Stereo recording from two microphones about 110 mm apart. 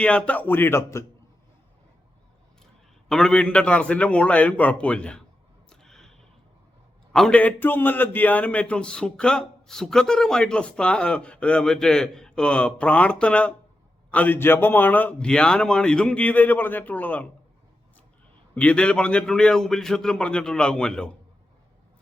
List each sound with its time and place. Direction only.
0.0 s speech: 10° left (ahead or behind); by 1.0 s 25° left (ahead or behind)
3.1 s a man's voice: 5° left (ahead or behind)
5.6 s a sound: 5° left (ahead or behind)
7.1 s a man's voice: 5° left (ahead or behind)
18.5 s a man's voice: 10° left (ahead or behind)